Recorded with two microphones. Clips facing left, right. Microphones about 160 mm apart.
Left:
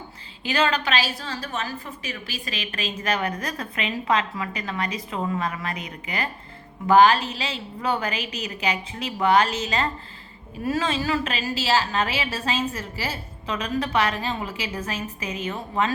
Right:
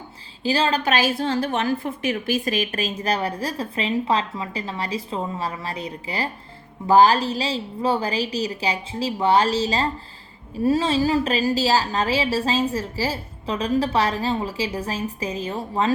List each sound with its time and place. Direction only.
0.4 s a woman's voice: 30° right (ahead or behind)
0.9 s a woman's voice: 50° right (ahead or behind); by 15.9 s 30° right (ahead or behind)